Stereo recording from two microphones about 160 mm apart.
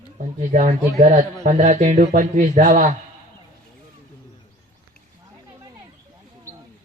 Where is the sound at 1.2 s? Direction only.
55° right (ahead or behind).